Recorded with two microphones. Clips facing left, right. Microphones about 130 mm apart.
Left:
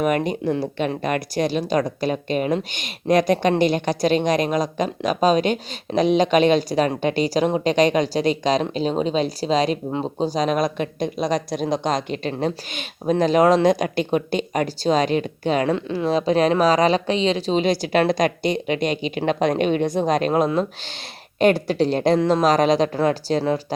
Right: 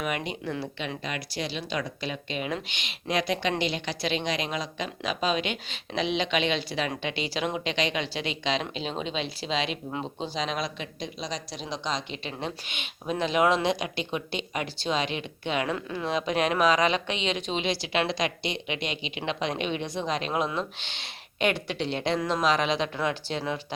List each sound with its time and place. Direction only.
0.0 s speech: 45° left (ahead or behind)